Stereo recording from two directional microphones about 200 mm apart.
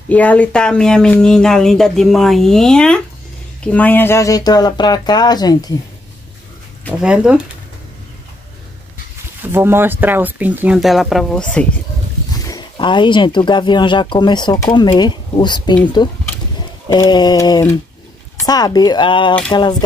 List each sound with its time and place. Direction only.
0.1 s speech: 5° left (ahead or behind)
7.0 s speech: 5° right (ahead or behind)
9.4 s speech: 10° right (ahead or behind)
12.3 s speech: 20° left (ahead or behind)
16.9 s speech: 20° left (ahead or behind)